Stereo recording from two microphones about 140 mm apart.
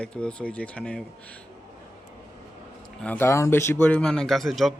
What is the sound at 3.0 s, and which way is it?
Speech, 15° left (ahead or behind).